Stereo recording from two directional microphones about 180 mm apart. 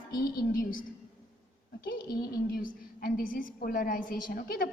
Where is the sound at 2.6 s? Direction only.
55° left (ahead or behind).